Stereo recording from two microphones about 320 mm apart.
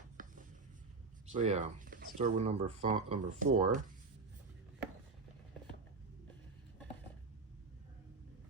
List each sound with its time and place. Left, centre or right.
0.2 s writing: right
1.3 s speech: right